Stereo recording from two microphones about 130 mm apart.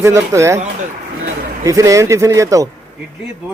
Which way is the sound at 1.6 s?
25° right (ahead or behind).